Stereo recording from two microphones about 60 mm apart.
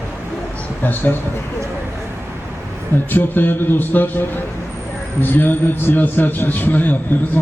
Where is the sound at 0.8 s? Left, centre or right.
Left.